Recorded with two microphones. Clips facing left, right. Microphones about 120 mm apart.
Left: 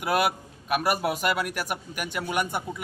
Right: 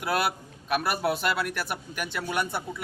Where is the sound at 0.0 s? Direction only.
10° left (ahead or behind).